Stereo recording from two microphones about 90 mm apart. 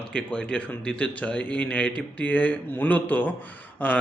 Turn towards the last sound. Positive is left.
turn(degrees=15)  # may be behind; listen again after turning